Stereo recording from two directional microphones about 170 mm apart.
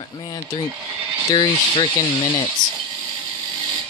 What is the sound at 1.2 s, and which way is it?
Speech, 25° left (ahead or behind).